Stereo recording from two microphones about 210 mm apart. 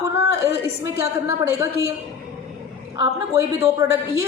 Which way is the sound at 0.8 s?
15° right (ahead or behind).